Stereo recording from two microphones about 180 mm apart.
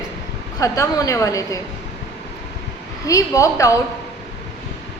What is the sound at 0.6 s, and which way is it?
Speech, 20° left (ahead or behind).